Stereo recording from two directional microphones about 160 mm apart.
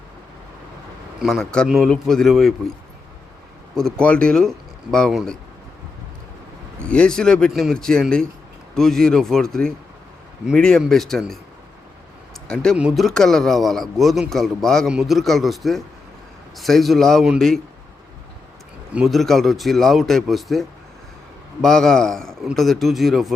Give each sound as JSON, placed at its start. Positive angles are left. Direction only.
{"t": 1.2, "sound": "a man's voice", "side_deg": 0}
{"t": 3.8, "sound": "a man's voice", "side_deg": 5}
{"t": 6.7, "sound": "a man's voice", "side_deg": 5}
{"t": 12.7, "sound": "a man's voice", "side_deg": -5}
{"t": 18.9, "sound": "a man's voice", "side_deg": 0}